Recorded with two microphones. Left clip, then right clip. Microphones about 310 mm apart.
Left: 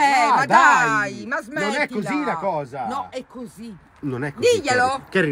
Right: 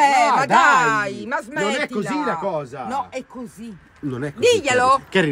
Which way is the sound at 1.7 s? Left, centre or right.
Centre.